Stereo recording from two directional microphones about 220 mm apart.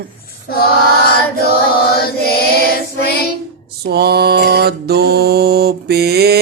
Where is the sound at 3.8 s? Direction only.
45° right (ahead or behind).